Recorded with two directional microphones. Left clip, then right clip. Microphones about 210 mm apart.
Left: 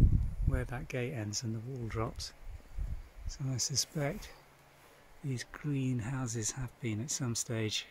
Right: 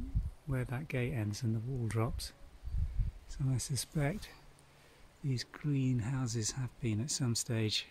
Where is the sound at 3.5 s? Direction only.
5° right (ahead or behind).